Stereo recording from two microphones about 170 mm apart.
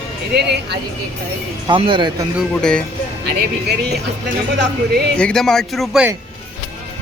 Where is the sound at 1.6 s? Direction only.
30° right (ahead or behind).